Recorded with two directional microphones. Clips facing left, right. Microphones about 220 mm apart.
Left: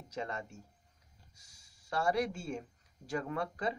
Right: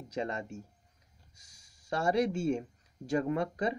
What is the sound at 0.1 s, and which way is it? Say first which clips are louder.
Speech: right 5 dB; 20° right (ahead or behind).